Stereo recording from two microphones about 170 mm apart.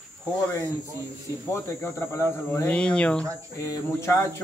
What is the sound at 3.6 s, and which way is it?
Speech, 15° left (ahead or behind).